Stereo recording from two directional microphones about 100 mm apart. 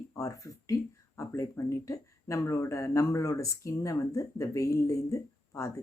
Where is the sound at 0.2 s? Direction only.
35° left (ahead or behind).